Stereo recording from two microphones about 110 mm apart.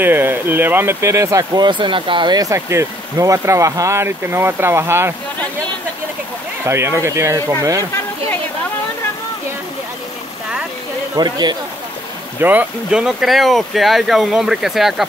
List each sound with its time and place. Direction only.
0.0 s speech: 20° right (ahead or behind)
1.6 s speech: 45° right (ahead or behind); by 5.1 s 20° right (ahead or behind)
6.6 s speech: 25° right (ahead or behind)
11.1 s speech: 40° right (ahead or behind)
12.4 s speech: 15° right (ahead or behind)